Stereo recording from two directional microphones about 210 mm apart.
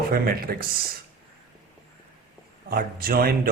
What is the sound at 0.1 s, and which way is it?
Speech, 45° right (ahead or behind).